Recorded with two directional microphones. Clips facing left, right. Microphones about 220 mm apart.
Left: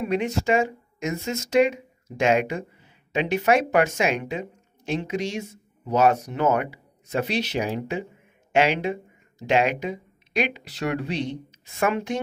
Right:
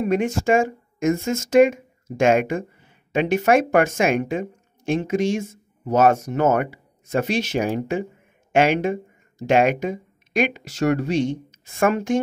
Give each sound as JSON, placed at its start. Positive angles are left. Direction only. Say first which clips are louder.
{"t": 0.0, "sound": "speech", "louder": "right 4 dB", "side_deg": -50}